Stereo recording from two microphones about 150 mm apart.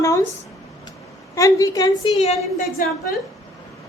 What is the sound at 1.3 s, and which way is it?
Speech, 20° left (ahead or behind).